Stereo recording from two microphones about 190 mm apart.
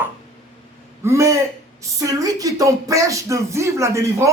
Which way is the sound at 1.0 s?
15° right (ahead or behind).